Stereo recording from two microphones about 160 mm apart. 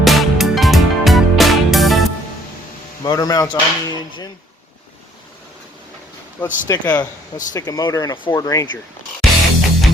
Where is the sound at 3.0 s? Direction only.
25° left (ahead or behind).